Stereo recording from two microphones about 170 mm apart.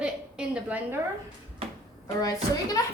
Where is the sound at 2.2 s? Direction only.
20° left (ahead or behind).